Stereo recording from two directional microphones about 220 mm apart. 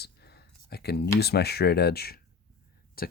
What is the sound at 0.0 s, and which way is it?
Speech, 45° left (ahead or behind).